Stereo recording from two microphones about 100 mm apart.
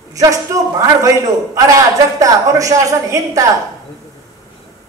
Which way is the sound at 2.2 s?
35° right (ahead or behind).